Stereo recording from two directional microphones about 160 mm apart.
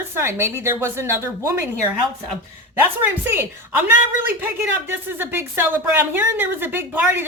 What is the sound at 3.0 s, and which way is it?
A woman's voice, 15° right (ahead or behind).